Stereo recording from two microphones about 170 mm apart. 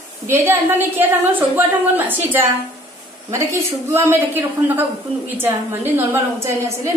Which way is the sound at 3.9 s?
15° right (ahead or behind).